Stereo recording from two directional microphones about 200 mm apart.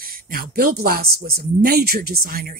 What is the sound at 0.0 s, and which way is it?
Speech, 45° right (ahead or behind).